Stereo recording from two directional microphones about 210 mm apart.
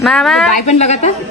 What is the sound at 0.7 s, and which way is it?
Speech, 35° left (ahead or behind).